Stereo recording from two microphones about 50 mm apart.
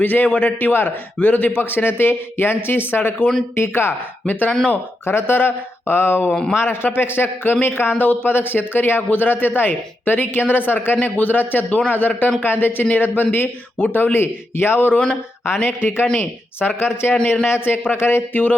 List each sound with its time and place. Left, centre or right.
0.0 s a man's voice: left
5.0 s a man's voice: left